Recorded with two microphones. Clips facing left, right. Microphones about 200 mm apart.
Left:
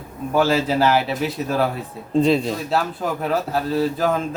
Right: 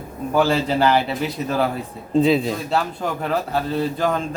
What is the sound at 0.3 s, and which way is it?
A man's voice, centre (ahead or behind).